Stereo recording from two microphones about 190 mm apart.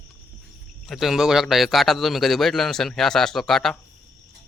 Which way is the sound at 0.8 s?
Centre (ahead or behind).